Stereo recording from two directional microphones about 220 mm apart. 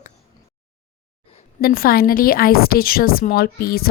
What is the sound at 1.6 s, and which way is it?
A woman's voice, 40° left (ahead or behind).